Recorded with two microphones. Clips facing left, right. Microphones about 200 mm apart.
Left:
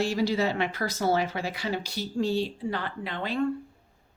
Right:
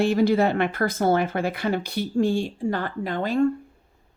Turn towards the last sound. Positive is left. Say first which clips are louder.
# right 6 dB
turn(degrees=-45)  # may be behind; listen again after turning